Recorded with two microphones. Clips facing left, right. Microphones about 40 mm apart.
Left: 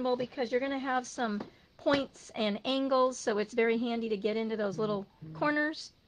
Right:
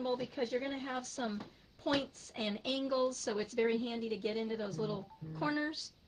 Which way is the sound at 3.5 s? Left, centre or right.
Left.